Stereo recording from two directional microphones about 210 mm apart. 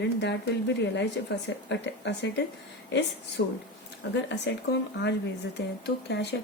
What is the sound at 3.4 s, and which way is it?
Speech, 55° left (ahead or behind).